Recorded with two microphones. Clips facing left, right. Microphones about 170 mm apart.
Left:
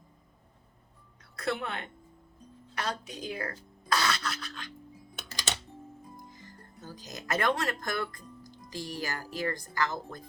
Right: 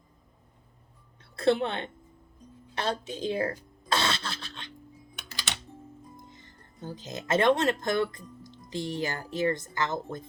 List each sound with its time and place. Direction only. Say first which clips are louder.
1.4 s speech: right 8 dB; 30° right (ahead or behind)
3.8 s cough: right 1 dB; 25° right (ahead or behind)
6.3 s speech: left 3 dB; 25° right (ahead or behind)